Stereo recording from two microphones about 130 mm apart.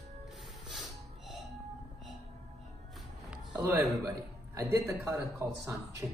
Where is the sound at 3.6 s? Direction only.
25° right (ahead or behind).